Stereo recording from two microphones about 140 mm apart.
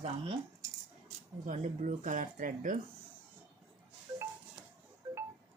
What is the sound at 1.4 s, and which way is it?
Speech, 60° right (ahead or behind).